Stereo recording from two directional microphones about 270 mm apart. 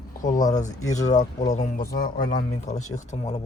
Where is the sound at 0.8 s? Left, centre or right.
Centre.